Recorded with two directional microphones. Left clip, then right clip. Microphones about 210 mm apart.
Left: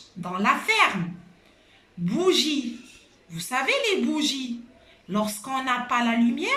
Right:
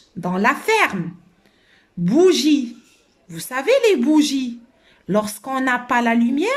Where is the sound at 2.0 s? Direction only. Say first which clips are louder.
Right 8 dB; 50° right (ahead or behind).